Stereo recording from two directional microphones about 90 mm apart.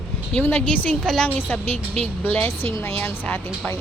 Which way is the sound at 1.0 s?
5° left (ahead or behind).